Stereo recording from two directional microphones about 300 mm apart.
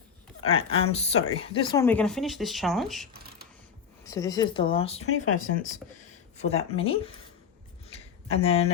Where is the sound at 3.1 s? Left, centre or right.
Right.